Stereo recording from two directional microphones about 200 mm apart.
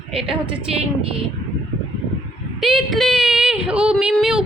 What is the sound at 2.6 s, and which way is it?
Speech, centre (ahead or behind).